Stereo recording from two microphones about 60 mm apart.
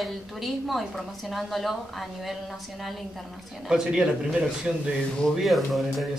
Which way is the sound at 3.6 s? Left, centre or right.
Centre.